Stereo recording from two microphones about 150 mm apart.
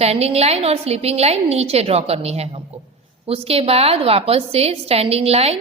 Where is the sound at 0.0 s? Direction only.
45° right (ahead or behind).